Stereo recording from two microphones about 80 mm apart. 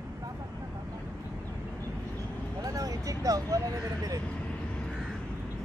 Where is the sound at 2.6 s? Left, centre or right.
Right.